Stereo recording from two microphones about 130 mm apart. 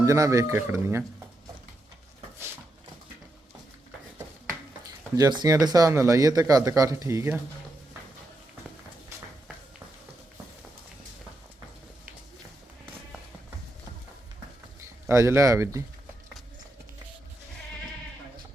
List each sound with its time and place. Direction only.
0.0 s speech: 25° right (ahead or behind)
4.9 s speech: 30° right (ahead or behind)
14.8 s speech: 20° right (ahead or behind)